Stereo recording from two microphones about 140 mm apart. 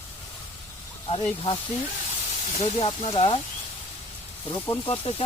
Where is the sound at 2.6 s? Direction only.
40° left (ahead or behind).